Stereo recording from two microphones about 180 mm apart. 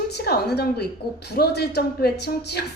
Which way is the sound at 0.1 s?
65° left (ahead or behind).